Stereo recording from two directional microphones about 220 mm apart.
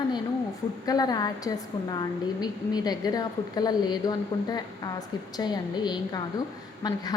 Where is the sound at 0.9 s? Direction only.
15° left (ahead or behind).